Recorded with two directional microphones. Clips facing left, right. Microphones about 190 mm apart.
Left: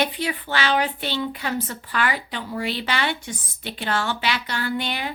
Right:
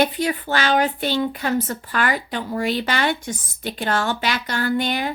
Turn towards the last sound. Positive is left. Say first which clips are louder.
# right 5 dB
turn(degrees=-45)  # may be behind; listen again after turning